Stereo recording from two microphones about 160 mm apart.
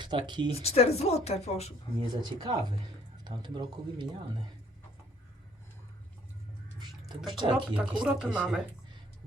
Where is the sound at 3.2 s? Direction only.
30° right (ahead or behind).